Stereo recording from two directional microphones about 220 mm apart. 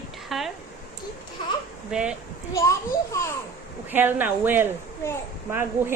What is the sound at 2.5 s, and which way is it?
Child singing, 15° left (ahead or behind).